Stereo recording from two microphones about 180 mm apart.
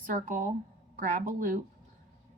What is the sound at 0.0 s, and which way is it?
Speech, 50° right (ahead or behind).